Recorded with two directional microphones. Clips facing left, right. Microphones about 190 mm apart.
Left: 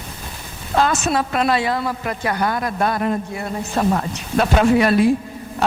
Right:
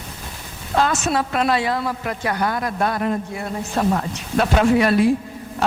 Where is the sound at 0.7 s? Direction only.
15° left (ahead or behind).